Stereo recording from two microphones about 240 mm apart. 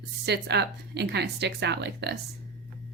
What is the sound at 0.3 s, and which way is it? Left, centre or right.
A woman's voice, right.